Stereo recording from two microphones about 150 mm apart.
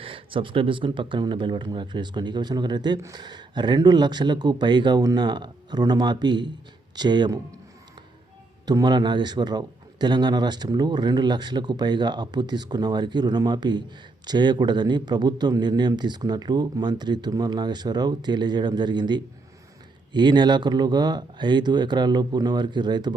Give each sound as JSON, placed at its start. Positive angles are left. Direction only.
{"t": 0.0, "sound": "speech", "side_deg": -35}
{"t": 8.6, "sound": "speech", "side_deg": -30}